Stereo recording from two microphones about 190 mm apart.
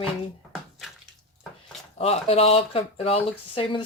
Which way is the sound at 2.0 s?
30° left (ahead or behind).